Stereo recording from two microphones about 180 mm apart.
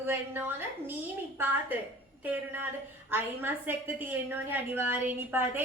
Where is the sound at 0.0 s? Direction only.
10° right (ahead or behind).